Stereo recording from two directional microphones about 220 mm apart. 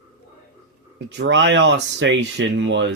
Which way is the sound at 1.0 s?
55° right (ahead or behind).